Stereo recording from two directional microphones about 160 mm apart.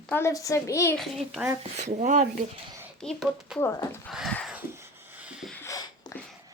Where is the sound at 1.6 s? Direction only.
50° right (ahead or behind).